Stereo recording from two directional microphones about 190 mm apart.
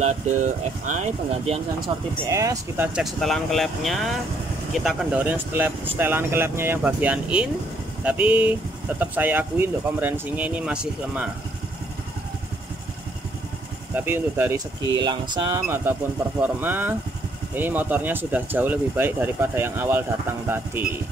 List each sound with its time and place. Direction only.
2.2 s speech: 15° right (ahead or behind)
2.9 s speech: centre (ahead or behind)
13.9 s speech: 10° right (ahead or behind)